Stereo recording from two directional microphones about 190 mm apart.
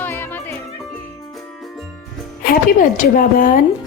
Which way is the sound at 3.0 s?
45° left (ahead or behind).